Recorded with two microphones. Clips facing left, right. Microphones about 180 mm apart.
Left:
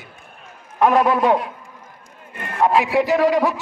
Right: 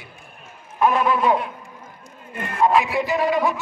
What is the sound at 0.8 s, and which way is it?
Speech, 80° left.